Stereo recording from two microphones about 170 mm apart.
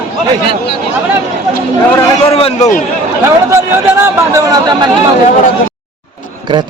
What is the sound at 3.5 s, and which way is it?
Speech, 15° right (ahead or behind).